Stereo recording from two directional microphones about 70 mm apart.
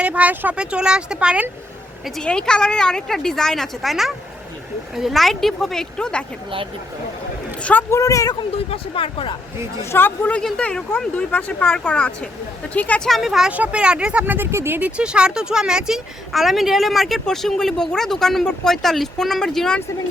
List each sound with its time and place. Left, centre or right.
0.0 s speech: centre
2.2 s a woman's voice: centre
7.6 s a man's voice: left
7.9 s speech: left
9.9 s speech: left
10.4 s a woman's voice: centre
13.1 s speech: centre
13.5 s speech: centre
14.3 s speech: right
14.8 s speech: centre